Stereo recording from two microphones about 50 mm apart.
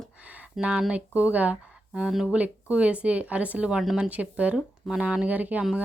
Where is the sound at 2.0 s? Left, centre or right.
Centre.